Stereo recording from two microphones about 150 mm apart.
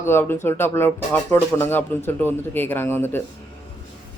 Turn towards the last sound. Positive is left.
turn(degrees=15)  # may be behind; listen again after turning